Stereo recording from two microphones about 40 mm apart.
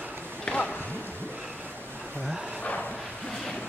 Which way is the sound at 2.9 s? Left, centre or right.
Centre.